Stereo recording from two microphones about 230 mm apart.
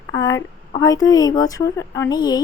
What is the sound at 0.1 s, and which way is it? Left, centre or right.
A woman's voice, centre.